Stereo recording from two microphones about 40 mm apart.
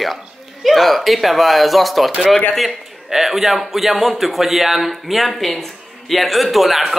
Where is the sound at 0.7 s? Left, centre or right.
Centre.